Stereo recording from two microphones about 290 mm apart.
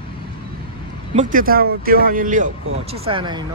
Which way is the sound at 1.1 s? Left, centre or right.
Right.